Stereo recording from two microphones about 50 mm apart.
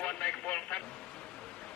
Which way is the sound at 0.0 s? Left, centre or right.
Left.